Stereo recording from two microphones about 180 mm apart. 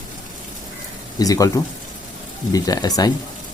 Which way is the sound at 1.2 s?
20° left (ahead or behind).